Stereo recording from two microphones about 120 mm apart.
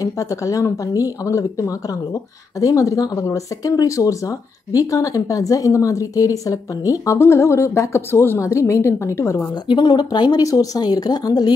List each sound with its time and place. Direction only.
0.0 s speech: 30° left (ahead or behind)
9.7 s speech: 40° left (ahead or behind)